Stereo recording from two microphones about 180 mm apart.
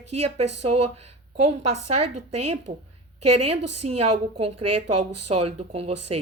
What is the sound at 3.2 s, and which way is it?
A woman's voice, 35° right (ahead or behind).